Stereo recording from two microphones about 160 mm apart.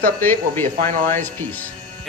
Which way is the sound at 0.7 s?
50° right (ahead or behind).